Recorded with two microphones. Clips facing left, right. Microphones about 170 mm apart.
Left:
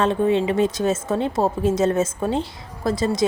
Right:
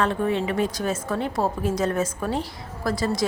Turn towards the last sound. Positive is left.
turn(degrees=20)  # may be behind; listen again after turning